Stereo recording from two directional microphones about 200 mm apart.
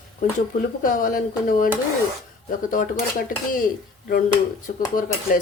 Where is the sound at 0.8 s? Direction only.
45° left (ahead or behind).